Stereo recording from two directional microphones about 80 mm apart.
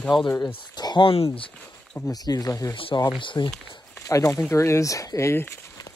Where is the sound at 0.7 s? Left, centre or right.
Left.